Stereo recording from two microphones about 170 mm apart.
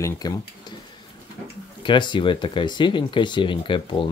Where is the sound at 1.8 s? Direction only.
30° left (ahead or behind).